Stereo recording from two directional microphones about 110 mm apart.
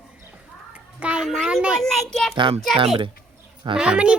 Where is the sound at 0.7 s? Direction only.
10° right (ahead or behind).